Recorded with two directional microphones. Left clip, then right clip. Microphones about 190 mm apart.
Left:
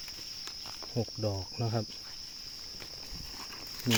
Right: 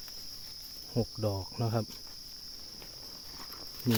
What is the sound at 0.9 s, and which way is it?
Cricket, 15° right (ahead or behind).